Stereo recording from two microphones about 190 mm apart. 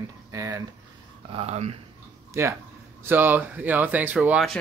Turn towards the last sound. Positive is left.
turn(degrees=-5)  # may be behind; listen again after turning